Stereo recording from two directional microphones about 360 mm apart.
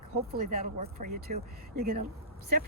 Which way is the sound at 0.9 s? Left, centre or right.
Right.